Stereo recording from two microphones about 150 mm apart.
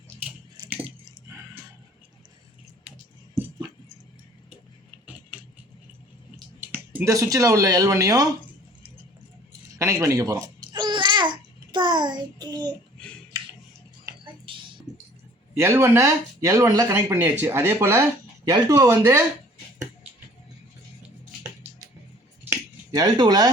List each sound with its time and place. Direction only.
6.6 s speech: 10° right (ahead or behind)
9.5 s babbling: 20° right (ahead or behind)
13.3 s a sound: 25° right (ahead or behind)
15.5 s speech: 15° right (ahead or behind)
23.0 s speech: 30° right (ahead or behind)